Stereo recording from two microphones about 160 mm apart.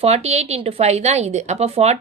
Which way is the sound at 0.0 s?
40° right (ahead or behind).